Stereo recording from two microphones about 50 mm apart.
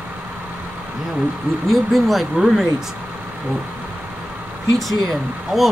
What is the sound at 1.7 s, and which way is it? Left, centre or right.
Speech, centre.